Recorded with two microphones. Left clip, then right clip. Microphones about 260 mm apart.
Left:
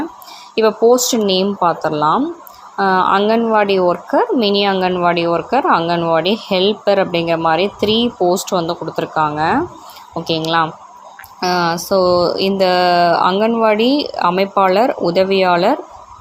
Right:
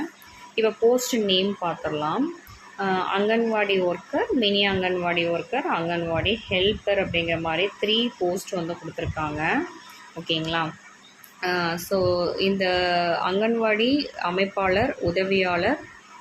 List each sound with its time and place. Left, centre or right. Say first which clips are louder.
0.5 s speech: left 9 dB; left